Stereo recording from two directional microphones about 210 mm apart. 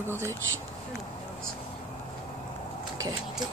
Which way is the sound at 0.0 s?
10° right (ahead or behind).